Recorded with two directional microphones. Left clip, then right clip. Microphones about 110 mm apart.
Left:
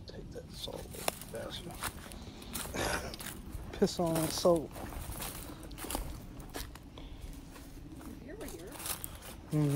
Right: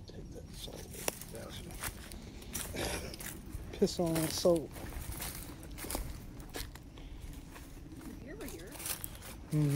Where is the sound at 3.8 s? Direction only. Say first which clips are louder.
Left 1 dB; 15° left (ahead or behind).